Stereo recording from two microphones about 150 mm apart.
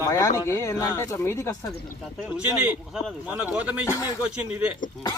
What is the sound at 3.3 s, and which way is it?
Speech, 5° right (ahead or behind).